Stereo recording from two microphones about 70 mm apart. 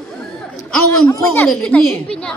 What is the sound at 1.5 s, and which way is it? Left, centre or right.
Speech, centre.